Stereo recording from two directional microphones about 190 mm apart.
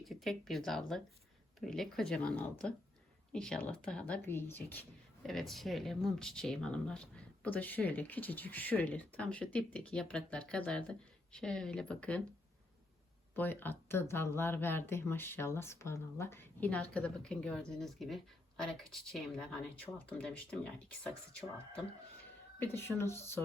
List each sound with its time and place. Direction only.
0.0 s speech: centre (ahead or behind)
13.3 s speech: 10° left (ahead or behind)
22.6 s speech: 15° left (ahead or behind)